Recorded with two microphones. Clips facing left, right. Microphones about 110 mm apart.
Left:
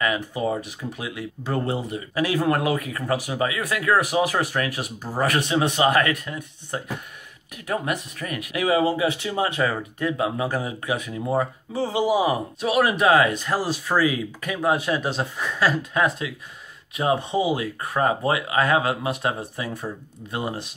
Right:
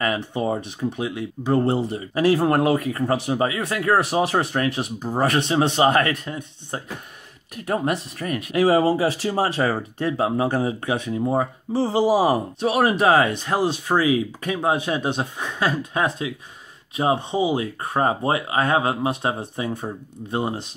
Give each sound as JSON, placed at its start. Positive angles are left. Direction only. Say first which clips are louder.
{"t": 0.0, "sound": "speech", "louder": "right 1 dB", "side_deg": -30}